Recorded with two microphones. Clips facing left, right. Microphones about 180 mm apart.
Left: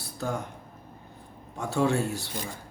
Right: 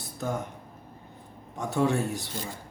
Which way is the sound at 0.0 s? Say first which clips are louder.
Even; 20° right (ahead or behind).